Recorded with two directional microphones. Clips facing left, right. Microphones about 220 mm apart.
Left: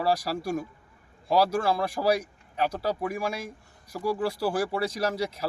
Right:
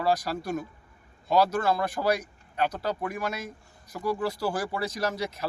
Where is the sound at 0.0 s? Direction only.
5° left (ahead or behind).